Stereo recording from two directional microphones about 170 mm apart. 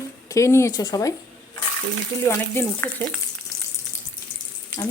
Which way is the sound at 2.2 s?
15° left (ahead or behind).